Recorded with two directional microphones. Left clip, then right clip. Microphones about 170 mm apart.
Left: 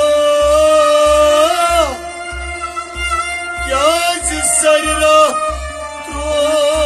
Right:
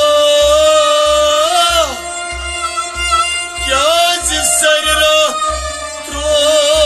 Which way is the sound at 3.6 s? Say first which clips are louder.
Right 2 dB; 10° left (ahead or behind).